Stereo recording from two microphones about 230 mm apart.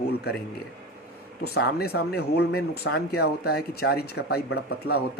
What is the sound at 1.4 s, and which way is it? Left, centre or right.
Speech, left.